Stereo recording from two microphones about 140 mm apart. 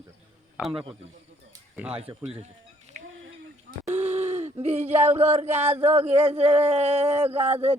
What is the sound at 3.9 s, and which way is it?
Speech, 50° right (ahead or behind).